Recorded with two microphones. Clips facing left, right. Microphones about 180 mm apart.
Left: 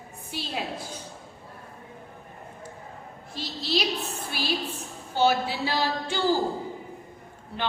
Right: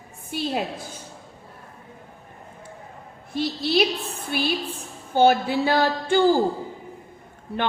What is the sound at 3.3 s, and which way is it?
Speech, 55° right (ahead or behind).